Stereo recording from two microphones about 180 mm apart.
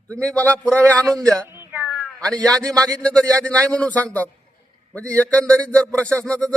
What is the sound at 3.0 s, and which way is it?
Music, 5° left (ahead or behind).